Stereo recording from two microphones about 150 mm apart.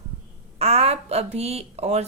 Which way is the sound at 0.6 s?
45° right (ahead or behind).